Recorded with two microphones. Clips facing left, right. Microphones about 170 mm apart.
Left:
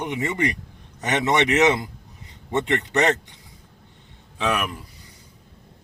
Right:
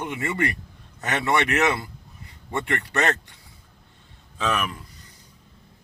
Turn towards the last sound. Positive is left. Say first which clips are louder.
# left 2 dB
turn(degrees=10)  # may be behind; listen again after turning